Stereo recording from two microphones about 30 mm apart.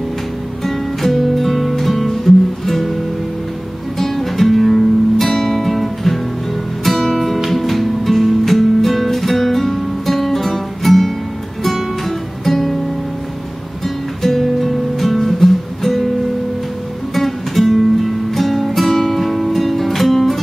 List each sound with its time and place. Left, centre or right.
0.7 s music: centre
4.0 s music: centre
12.4 s music: centre
13.8 s music: centre
17.1 s music: centre